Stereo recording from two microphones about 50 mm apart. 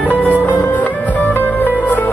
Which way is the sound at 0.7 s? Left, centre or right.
Left.